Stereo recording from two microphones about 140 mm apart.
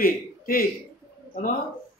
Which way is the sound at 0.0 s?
90° left.